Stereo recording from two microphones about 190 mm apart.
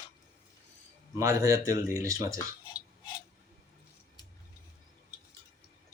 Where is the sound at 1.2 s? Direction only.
15° right (ahead or behind).